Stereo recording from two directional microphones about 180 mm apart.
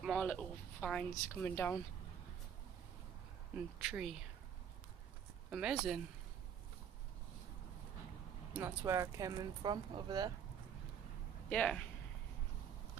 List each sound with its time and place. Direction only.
0.0 s speech: 5° left (ahead or behind)
3.5 s speech: 5° right (ahead or behind)
5.5 s speech: 5° right (ahead or behind)
8.5 s speech: 15° right (ahead or behind)
11.4 s speech: 5° left (ahead or behind)